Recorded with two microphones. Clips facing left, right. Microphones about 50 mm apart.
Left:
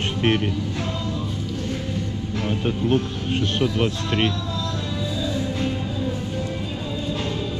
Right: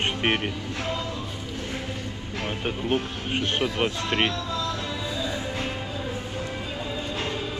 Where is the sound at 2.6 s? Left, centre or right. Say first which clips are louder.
Left 4 dB; right.